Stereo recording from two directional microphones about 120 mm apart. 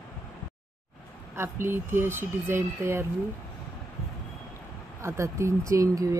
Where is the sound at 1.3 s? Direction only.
20° right (ahead or behind).